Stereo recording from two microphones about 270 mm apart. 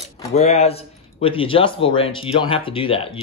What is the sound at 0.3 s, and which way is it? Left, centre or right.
Speech, left.